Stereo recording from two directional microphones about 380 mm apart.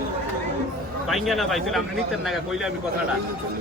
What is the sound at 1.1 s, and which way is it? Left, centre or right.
Speech, centre.